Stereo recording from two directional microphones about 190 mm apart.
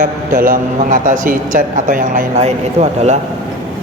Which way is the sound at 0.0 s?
45° right (ahead or behind).